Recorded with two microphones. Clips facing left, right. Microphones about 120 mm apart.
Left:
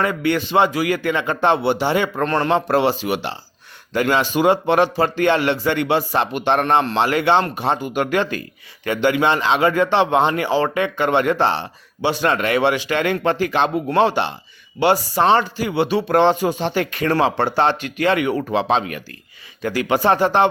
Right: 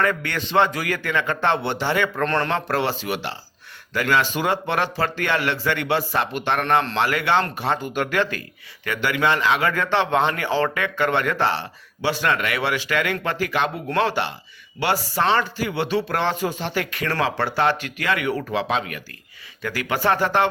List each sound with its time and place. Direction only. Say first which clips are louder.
0.0 s a man's voice: left 4 dB; 15° left (ahead or behind)